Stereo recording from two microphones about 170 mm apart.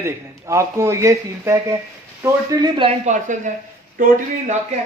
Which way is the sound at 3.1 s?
45° right (ahead or behind).